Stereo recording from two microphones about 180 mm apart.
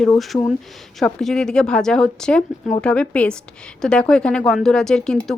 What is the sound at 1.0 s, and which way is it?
A woman's voice, 5° left (ahead or behind).